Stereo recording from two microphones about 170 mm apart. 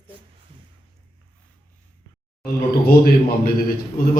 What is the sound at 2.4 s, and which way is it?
A man's voice, 65° left (ahead or behind).